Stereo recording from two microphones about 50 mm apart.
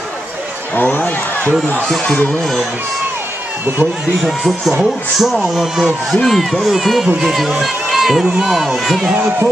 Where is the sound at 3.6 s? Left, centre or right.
Right.